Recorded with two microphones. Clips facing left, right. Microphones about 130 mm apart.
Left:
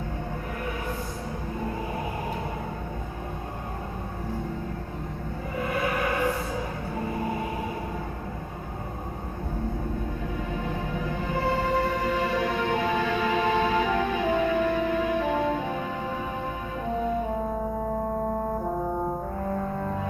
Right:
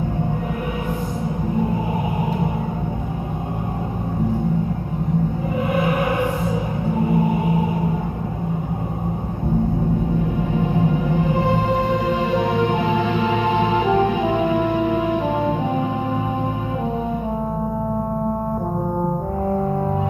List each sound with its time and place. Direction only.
10.8 s music: 20° right (ahead or behind)